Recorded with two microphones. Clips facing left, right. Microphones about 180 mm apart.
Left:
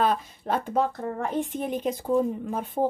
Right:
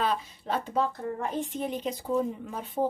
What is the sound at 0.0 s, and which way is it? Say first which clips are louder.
A woman's voice: left 4 dB; 50° left (ahead or behind).